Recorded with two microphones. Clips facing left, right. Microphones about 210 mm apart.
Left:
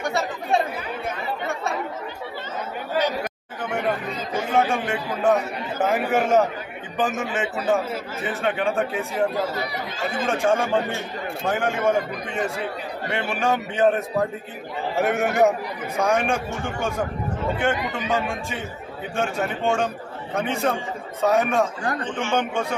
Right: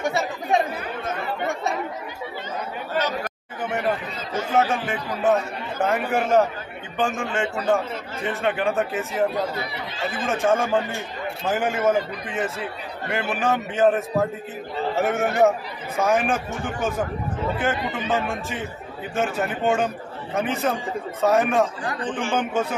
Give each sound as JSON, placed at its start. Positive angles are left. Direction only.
{"t": 4.6, "sound": "a man's voice", "side_deg": 0}
{"t": 17.9, "sound": "a man's voice", "side_deg": 0}